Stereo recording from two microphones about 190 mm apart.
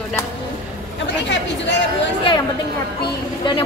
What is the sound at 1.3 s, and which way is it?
Speech, 65° left (ahead or behind).